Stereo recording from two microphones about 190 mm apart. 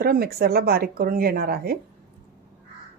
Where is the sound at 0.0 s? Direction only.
50° right (ahead or behind).